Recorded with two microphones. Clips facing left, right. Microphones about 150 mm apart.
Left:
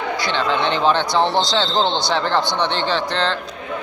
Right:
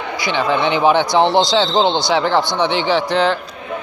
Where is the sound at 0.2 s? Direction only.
10° right (ahead or behind).